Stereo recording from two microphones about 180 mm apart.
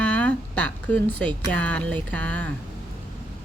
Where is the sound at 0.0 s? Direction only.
10° left (ahead or behind).